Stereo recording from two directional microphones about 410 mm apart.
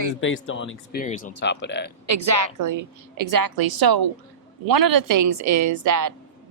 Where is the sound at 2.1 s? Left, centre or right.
Right.